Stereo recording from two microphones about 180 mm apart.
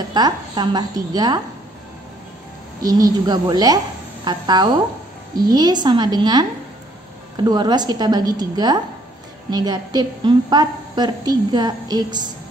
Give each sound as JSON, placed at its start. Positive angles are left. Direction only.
{"t": 0.1, "sound": "a woman's voice", "side_deg": -25}
{"t": 2.8, "sound": "a woman's voice", "side_deg": -20}
{"t": 7.4, "sound": "a woman's voice", "side_deg": -25}